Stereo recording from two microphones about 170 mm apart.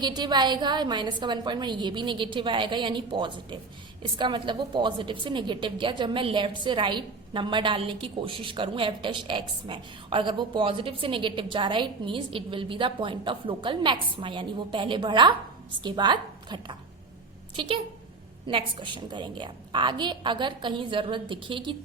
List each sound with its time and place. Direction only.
0.0 s a woman's voice: 25° right (ahead or behind)
18.4 s a woman's voice: 30° right (ahead or behind)